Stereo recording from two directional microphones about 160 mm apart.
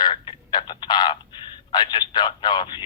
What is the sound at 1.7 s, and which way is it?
Speech, 25° left (ahead or behind).